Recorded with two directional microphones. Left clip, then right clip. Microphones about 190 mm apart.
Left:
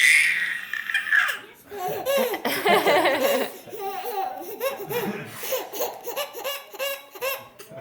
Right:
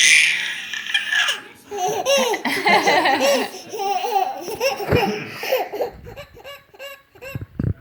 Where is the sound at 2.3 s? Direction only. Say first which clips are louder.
Right 4 dB; 25° left (ahead or behind).